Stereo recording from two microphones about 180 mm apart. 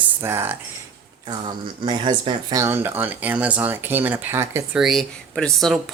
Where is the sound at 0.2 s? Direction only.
15° right (ahead or behind).